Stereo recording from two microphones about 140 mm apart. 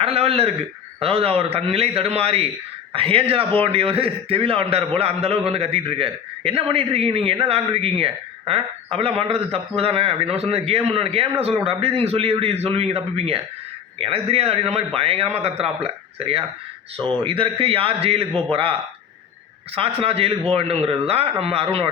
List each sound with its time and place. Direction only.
0.0 s a man's voice: 45° right (ahead or behind)